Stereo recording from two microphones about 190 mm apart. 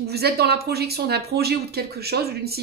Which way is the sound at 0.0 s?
55° right (ahead or behind).